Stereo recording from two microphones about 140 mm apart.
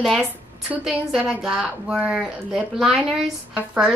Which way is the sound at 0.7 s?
5° right (ahead or behind).